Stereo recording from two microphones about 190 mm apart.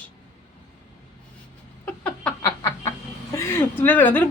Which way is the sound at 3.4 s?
10° left (ahead or behind).